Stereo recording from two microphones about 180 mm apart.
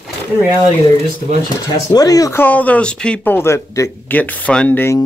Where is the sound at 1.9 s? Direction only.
20° left (ahead or behind).